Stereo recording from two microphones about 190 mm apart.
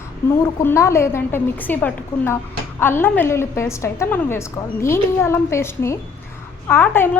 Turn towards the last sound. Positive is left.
turn(degrees=10)  # may be behind; listen again after turning